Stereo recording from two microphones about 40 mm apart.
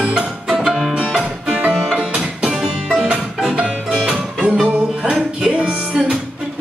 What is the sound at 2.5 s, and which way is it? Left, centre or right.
Music, centre.